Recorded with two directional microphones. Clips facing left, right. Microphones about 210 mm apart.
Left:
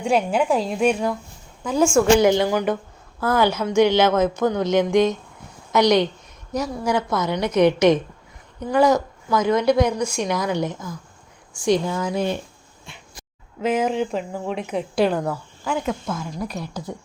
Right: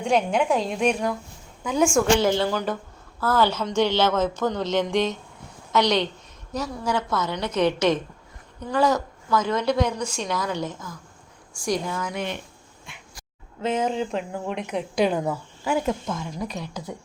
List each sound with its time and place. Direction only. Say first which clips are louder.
0.0 s speech: left 2 dB; 5° left (ahead or behind)
2.1 s a woman's voice: left 5 dB; 15° left (ahead or behind)
11.6 s speech: left 6 dB; 25° left (ahead or behind)
12.8 s a sound: left 3 dB; 30° left (ahead or behind)
13.7 s speech: left 2 dB; 10° left (ahead or behind)